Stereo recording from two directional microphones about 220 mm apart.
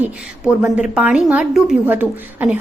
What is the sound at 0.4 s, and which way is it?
A woman's voice, 5° right (ahead or behind).